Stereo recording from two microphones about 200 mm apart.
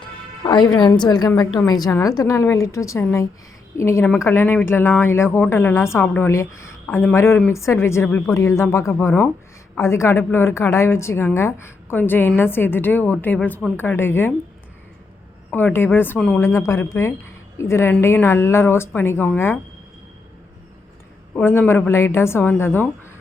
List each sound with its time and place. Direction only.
0.4 s a woman's voice: 20° left (ahead or behind)
15.4 s speech: 10° left (ahead or behind)
21.3 s speech: 10° left (ahead or behind)